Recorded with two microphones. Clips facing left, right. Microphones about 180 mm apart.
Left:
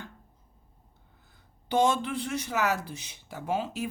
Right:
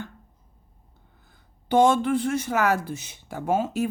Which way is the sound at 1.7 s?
55° right (ahead or behind).